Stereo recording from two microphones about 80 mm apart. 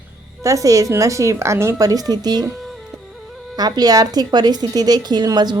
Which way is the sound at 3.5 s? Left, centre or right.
Right.